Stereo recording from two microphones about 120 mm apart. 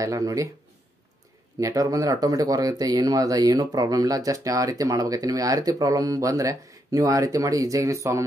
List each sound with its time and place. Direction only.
0.0 s speech: 30° right (ahead or behind)
1.6 s speech: 30° right (ahead or behind)